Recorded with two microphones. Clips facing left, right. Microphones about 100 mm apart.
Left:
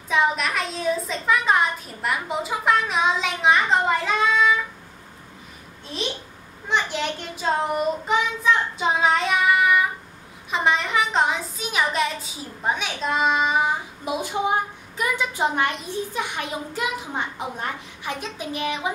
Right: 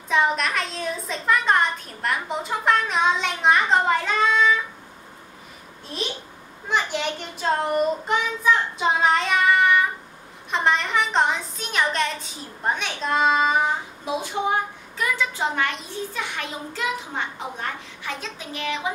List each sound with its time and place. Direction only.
0.1 s a woman's voice: centre (ahead or behind)
6.7 s a woman's voice: centre (ahead or behind); by 18.9 s 15° left (ahead or behind)